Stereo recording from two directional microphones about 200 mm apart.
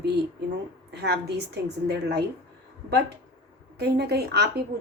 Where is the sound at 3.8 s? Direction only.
55° right (ahead or behind).